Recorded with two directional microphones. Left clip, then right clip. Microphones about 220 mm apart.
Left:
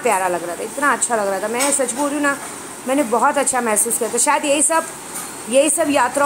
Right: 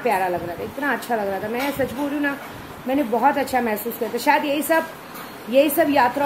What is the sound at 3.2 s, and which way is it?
A woman's voice, 15° right (ahead or behind).